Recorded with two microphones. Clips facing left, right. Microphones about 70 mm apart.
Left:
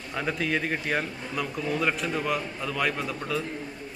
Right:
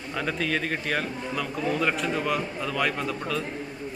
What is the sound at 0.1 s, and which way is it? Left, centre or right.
A man's voice, centre.